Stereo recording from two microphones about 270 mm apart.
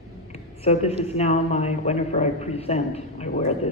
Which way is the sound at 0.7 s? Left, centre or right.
Left.